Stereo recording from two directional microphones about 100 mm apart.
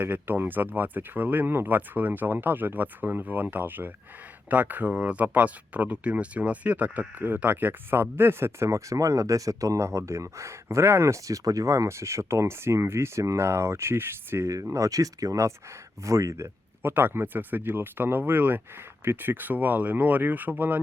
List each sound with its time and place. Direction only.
0.0 s speech: 20° right (ahead or behind)